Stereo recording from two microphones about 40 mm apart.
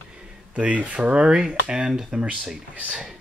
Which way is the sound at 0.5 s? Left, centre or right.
Right.